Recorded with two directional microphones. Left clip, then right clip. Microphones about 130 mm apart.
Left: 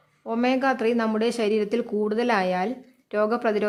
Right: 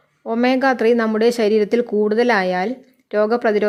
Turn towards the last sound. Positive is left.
turn(degrees=-30)  # may be behind; listen again after turning